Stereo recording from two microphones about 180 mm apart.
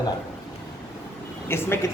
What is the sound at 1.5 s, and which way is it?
Speech, 15° left (ahead or behind).